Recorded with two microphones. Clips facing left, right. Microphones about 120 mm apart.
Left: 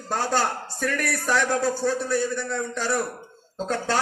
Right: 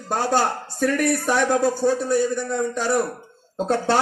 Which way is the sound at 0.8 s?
20° right (ahead or behind).